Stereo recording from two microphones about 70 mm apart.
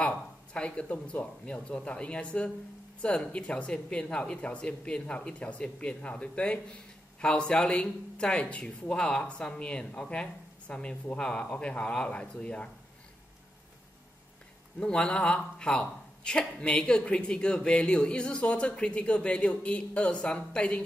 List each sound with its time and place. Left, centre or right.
0.5 s speech: centre
14.8 s speech: centre